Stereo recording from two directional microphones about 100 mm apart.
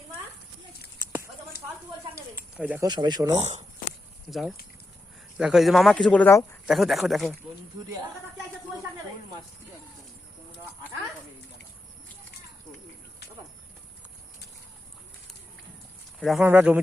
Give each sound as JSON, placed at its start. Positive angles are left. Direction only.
{"t": 1.1, "sound": "a sound", "side_deg": -20}
{"t": 2.8, "sound": "speech", "side_deg": -45}
{"t": 4.3, "sound": "speech", "side_deg": 0}
{"t": 6.1, "sound": "speech", "side_deg": 15}
{"t": 6.7, "sound": "speech", "side_deg": 0}
{"t": 16.4, "sound": "speech", "side_deg": -20}